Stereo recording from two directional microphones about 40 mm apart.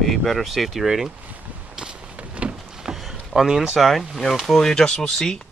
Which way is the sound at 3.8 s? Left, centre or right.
Centre.